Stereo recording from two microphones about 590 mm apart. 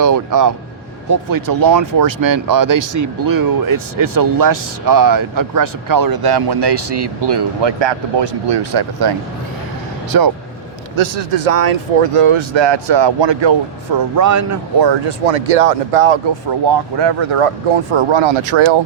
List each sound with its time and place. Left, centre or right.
0.0 s speech: right
10.9 s speech: right
14.2 s speech: right
15.3 s speech: right
16.5 s speech: right